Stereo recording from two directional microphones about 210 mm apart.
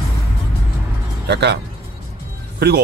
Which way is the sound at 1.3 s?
55° right (ahead or behind).